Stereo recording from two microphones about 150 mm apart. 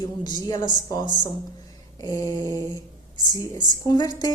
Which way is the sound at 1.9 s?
25° left (ahead or behind).